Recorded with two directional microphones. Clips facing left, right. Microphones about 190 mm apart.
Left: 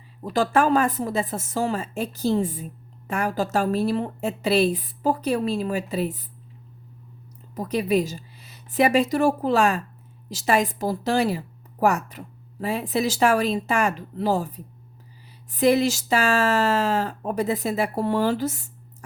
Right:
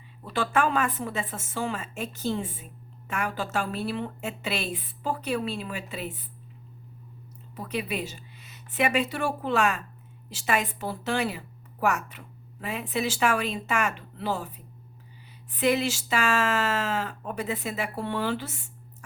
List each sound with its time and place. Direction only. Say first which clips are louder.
0.2 s a woman's voice: left 5 dB; 40° left (ahead or behind)
7.5 s a woman's voice: left 9 dB; 40° left (ahead or behind)